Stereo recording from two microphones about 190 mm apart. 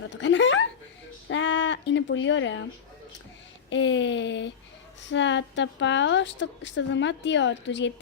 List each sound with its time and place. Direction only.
0.1 s a woman's voice: 75° left (ahead or behind)
1.3 s a sound: 75° left (ahead or behind)
3.7 s a woman's voice: 75° left (ahead or behind)